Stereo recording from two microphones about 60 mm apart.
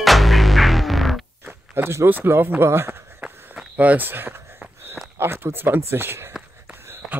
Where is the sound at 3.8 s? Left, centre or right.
Right.